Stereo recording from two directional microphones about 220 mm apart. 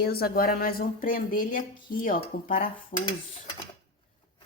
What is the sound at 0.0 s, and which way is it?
Speech, 45° left (ahead or behind).